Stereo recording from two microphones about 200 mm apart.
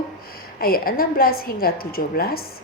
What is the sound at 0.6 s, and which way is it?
A woman's voice, 45° left (ahead or behind).